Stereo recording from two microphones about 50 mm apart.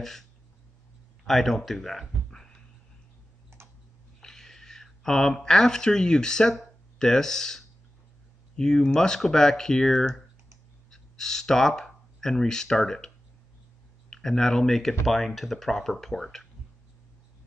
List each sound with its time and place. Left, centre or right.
1.2 s speech: centre
3.5 s tick-tock: right
4.2 s speech: centre
14.1 s speech: centre